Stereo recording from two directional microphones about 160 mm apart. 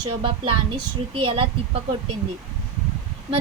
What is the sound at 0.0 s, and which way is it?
Speech, 30° right (ahead or behind).